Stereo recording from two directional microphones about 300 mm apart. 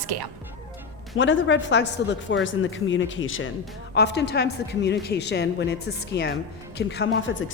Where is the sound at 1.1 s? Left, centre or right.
Left.